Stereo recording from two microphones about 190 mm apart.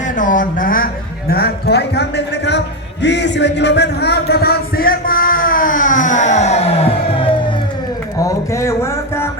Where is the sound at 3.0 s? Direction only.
65° left (ahead or behind); by 7.5 s 25° left (ahead or behind).